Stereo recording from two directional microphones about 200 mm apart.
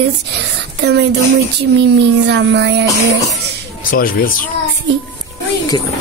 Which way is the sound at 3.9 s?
45° left (ahead or behind).